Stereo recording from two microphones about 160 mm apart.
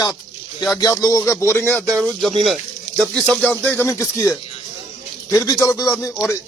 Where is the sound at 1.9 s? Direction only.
Centre (ahead or behind).